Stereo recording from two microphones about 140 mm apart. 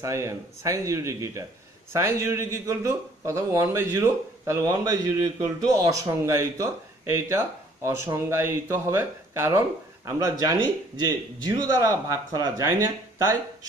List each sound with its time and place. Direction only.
0.0 s speech: 20° right (ahead or behind)